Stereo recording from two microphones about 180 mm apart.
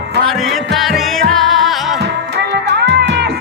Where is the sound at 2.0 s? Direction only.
75° right (ahead or behind).